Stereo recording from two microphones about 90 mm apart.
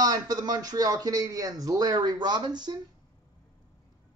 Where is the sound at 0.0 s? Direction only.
50° right (ahead or behind).